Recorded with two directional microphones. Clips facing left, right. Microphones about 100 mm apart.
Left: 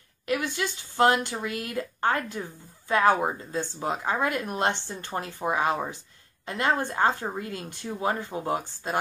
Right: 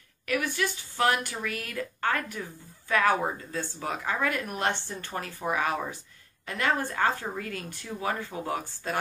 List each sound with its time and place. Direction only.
0.3 s a woman's voice: 20° left (ahead or behind)